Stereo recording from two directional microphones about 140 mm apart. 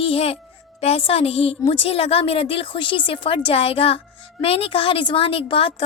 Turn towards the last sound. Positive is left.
turn(degrees=40)  # may be behind; listen again after turning